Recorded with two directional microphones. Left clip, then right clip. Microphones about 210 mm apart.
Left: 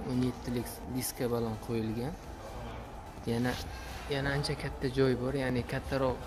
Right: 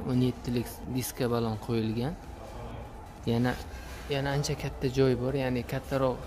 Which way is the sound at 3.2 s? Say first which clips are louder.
Right 3 dB; 15° right (ahead or behind).